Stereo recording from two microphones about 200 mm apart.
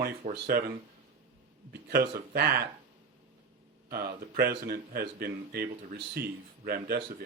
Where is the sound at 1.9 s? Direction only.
50° right (ahead or behind).